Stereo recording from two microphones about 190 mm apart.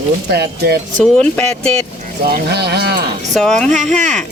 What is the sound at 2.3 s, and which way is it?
Speech, 55° right (ahead or behind).